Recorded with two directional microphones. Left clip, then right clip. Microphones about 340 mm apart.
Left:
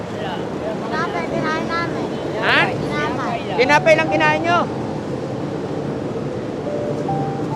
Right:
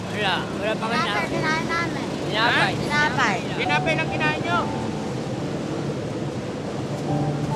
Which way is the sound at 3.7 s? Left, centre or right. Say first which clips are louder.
Left 9 dB; left.